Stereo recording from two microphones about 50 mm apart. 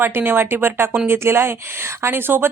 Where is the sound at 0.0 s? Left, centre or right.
Right.